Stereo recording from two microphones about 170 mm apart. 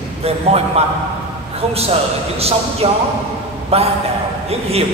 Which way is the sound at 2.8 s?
35° right (ahead or behind).